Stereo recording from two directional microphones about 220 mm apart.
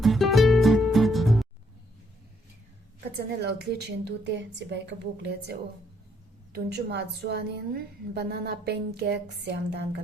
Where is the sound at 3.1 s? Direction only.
50° right (ahead or behind).